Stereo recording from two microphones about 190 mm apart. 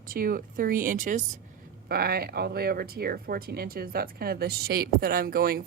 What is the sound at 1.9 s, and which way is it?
Speech, 55° right (ahead or behind).